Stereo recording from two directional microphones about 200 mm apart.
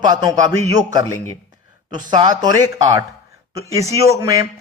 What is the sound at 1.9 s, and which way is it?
A man's voice, 20° right (ahead or behind).